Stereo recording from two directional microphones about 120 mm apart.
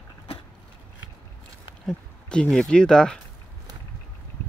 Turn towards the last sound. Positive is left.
turn(degrees=5)  # may be behind; listen again after turning